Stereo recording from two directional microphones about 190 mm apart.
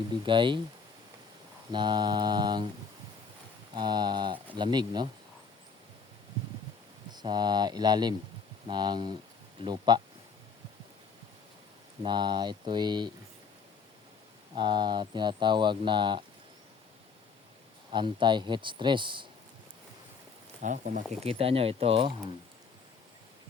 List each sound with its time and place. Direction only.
0.3 s speech: 25° right (ahead or behind)
1.7 s speech: 25° right (ahead or behind)
3.8 s speech: 25° right (ahead or behind)
7.1 s speech: 20° right (ahead or behind)
12.0 s speech: 25° right (ahead or behind)
14.5 s speech: 25° right (ahead or behind)
17.9 s speech: 25° right (ahead or behind)
20.6 s speech: 40° right (ahead or behind)
21.2 s speech: 30° right (ahead or behind)